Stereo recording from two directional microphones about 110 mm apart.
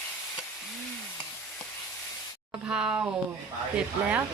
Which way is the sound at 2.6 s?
5° right (ahead or behind).